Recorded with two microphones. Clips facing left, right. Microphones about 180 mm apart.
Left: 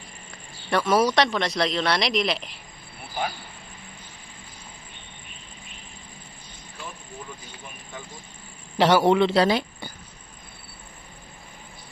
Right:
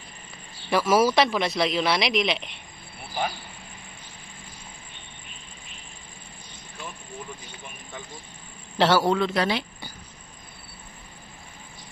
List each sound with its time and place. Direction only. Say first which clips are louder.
0.7 s speech: right 1 dB; centre (ahead or behind)
8.7 s a man's voice: left 3 dB; 15° left (ahead or behind); by 9.6 s 30° left (ahead or behind)